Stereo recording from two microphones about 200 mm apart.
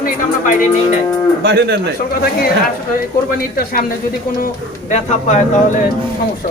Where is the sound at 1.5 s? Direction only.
55° right (ahead or behind).